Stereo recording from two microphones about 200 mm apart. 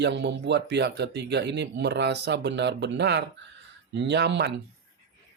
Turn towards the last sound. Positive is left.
turn(degrees=-55)  # may be behind; listen again after turning